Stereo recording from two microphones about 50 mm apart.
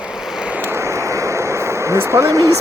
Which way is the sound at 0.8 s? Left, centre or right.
Right.